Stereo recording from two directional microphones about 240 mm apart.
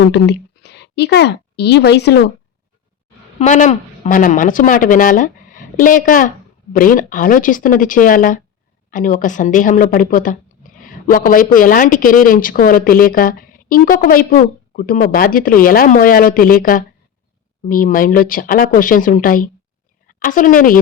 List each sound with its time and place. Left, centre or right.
0.1 s a woman's voice: left
3.3 s a woman's voice: left